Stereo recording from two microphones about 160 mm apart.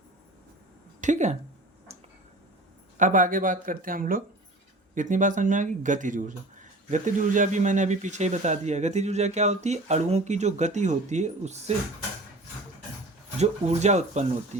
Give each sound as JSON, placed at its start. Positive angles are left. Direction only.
{"t": 1.0, "sound": "speech", "side_deg": -50}
{"t": 3.0, "sound": "speech", "side_deg": -55}
{"t": 13.4, "sound": "speech", "side_deg": -45}